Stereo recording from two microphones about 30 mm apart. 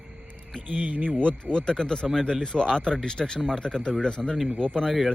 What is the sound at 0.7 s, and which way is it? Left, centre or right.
Speech, right.